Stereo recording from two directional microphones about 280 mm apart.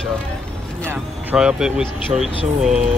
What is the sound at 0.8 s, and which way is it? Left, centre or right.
Speech, centre.